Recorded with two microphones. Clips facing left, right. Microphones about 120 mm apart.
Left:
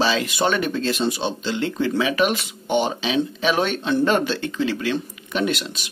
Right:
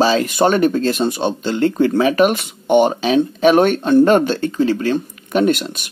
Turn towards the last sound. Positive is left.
turn(degrees=-50)  # may be behind; listen again after turning